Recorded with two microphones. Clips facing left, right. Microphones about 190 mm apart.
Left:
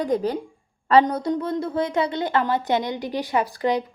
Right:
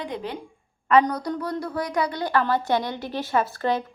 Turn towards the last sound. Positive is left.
turn(degrees=15)  # may be behind; listen again after turning